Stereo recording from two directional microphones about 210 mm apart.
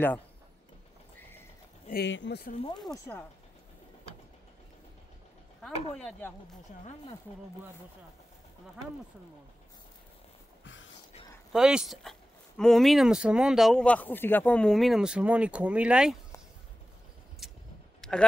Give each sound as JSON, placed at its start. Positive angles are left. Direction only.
{"t": 1.9, "sound": "speech", "side_deg": 55}
{"t": 2.9, "sound": "speech", "side_deg": 10}
{"t": 5.6, "sound": "speech", "side_deg": 5}
{"t": 6.8, "sound": "speech", "side_deg": 30}
{"t": 10.6, "sound": "a sound", "side_deg": 60}
{"t": 11.5, "sound": "speech", "side_deg": 0}
{"t": 17.4, "sound": "vehicle", "side_deg": 0}